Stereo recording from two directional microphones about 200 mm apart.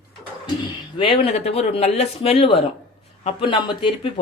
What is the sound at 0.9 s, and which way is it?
Speech, 25° left (ahead or behind).